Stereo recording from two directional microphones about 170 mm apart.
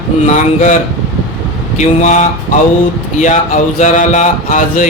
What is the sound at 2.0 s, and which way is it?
Speech, 45° left (ahead or behind).